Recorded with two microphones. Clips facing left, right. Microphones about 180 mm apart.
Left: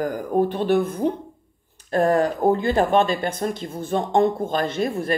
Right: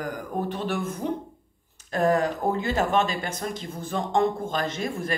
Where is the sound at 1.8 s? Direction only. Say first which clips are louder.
Left 4 dB; 35° left (ahead or behind).